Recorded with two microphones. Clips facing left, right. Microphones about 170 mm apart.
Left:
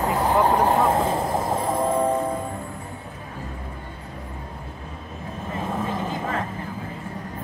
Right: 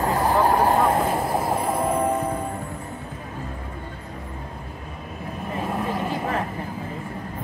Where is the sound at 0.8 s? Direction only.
25° left (ahead or behind).